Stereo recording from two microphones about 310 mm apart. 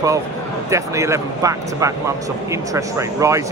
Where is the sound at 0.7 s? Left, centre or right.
Centre.